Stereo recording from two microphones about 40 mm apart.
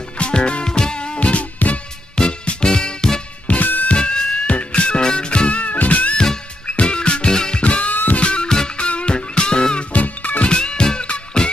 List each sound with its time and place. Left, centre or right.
0.2 s music: left
1.6 s music: left
2.1 s music: left
3.4 s music: left
3.9 s music: left
6.7 s music: left
7.6 s music: left
7.9 s music: left
8.2 s music: left
9.9 s music: left
10.5 s music: left